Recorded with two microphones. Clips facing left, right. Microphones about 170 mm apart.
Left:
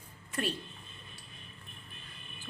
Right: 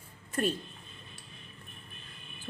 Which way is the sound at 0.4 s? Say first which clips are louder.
Right 5 dB; 45° right (ahead or behind).